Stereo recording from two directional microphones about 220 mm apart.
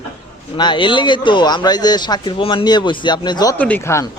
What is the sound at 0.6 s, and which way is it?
Speech, 20° left (ahead or behind).